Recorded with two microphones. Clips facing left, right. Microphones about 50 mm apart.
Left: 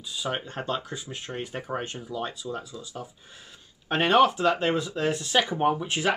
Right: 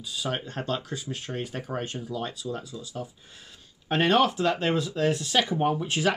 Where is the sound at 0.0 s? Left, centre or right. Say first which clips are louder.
Even; centre.